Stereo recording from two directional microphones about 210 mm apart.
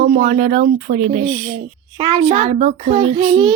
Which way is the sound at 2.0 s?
25° right (ahead or behind).